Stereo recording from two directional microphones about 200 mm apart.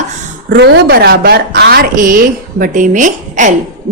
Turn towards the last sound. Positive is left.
turn(degrees=-40)  # may be behind; listen again after turning